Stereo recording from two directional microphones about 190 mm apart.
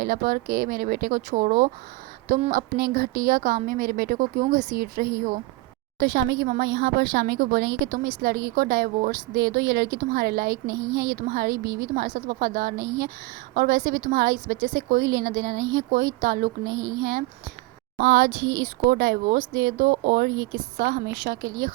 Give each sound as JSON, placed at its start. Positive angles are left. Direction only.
{"t": 0.0, "sound": "a woman's voice", "side_deg": -50}
{"t": 6.4, "sound": "a woman's voice", "side_deg": -55}
{"t": 10.5, "sound": "speech", "side_deg": -20}
{"t": 11.1, "sound": "a woman's voice", "side_deg": -50}
{"t": 16.6, "sound": "speech", "side_deg": -20}
{"t": 17.0, "sound": "a woman's voice", "side_deg": -55}
{"t": 18.3, "sound": "speech", "side_deg": -25}
{"t": 18.9, "sound": "a woman's voice", "side_deg": -55}
{"t": 20.3, "sound": "speech", "side_deg": -20}
{"t": 20.8, "sound": "a woman's voice", "side_deg": -55}